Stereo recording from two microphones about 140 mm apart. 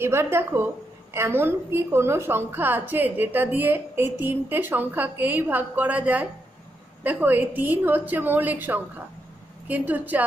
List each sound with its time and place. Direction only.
0.0 s a woman's voice: 20° right (ahead or behind)